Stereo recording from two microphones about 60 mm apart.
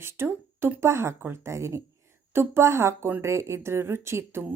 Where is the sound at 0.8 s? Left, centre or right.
Right.